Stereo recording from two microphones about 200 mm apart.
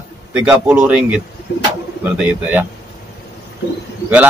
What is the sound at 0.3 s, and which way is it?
Speech, 10° right (ahead or behind).